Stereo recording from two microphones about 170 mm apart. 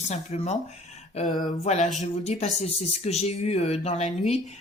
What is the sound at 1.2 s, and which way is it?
Speech, 55° left (ahead or behind).